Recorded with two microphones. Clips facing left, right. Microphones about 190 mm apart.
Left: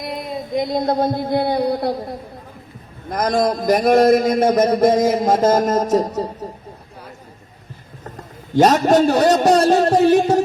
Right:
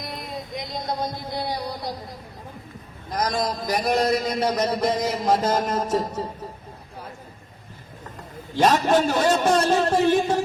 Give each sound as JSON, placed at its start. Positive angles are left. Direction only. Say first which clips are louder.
{"t": 0.5, "sound": "a man's voice", "louder": "left 12 dB", "side_deg": 55}
{"t": 8.5, "sound": "a man's voice", "louder": "left 6 dB", "side_deg": 40}